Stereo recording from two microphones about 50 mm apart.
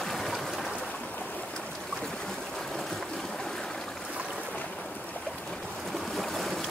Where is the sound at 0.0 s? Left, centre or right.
Centre.